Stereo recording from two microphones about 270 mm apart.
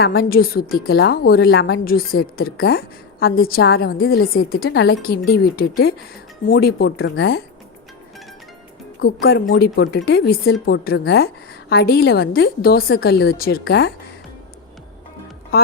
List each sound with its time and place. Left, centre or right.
0.0 s a woman's voice: left
9.2 s a woman's voice: left